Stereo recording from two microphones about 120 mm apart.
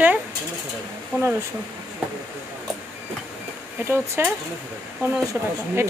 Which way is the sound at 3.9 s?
15° right (ahead or behind).